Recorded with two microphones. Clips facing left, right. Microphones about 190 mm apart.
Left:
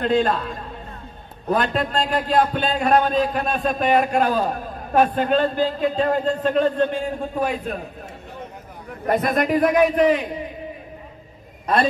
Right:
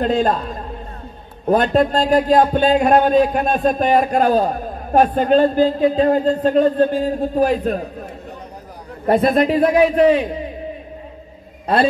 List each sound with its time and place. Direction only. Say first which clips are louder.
0.0 s a man's voice: right 2 dB; 40° right (ahead or behind)
1.5 s a man's voice: right 7 dB; 40° right (ahead or behind)
9.0 s a man's voice: right 6 dB; 30° right (ahead or behind)